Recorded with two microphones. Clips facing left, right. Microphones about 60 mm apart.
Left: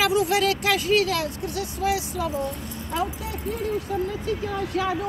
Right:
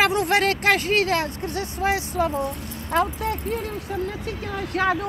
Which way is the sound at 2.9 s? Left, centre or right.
Right.